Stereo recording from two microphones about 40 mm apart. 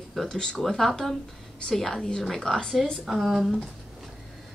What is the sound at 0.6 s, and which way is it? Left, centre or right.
Speech, centre.